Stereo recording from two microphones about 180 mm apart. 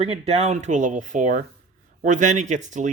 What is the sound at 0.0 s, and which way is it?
A man's voice, 35° right (ahead or behind).